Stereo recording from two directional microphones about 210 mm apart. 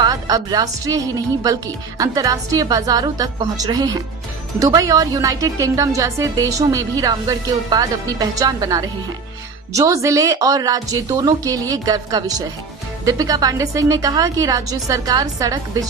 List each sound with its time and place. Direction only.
0.0 s a woman's voice: 20° right (ahead or behind)